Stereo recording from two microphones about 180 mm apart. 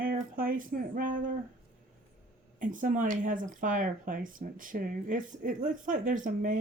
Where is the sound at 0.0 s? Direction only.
50° right (ahead or behind).